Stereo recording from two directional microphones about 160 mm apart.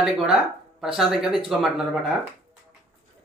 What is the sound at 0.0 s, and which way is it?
Speech, 5° right (ahead or behind).